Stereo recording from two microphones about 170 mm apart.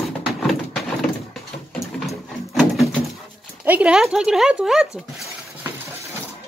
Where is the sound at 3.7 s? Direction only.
5° right (ahead or behind).